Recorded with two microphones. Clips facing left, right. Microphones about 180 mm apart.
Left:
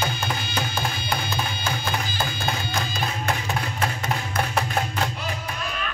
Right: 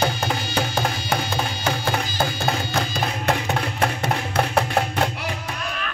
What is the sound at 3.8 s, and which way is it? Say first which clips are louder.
Music: right 4 dB; 60° right (ahead or behind).